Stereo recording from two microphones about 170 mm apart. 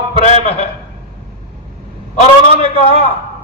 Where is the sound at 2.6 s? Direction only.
35° left (ahead or behind).